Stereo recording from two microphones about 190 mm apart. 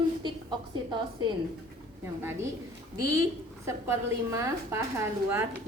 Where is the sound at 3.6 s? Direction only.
15° right (ahead or behind).